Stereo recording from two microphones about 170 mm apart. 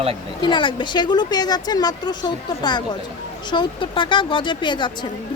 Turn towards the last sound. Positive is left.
turn(degrees=25)  # may be behind; listen again after turning